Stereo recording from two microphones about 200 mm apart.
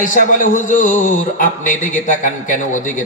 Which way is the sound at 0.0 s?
40° left (ahead or behind).